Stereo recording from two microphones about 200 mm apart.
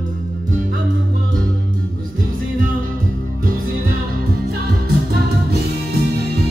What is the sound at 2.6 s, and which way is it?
Music, 45° right (ahead or behind).